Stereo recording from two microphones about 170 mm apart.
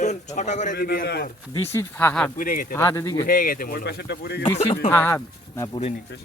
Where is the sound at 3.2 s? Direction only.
55° left (ahead or behind); by 4.4 s 75° left (ahead or behind).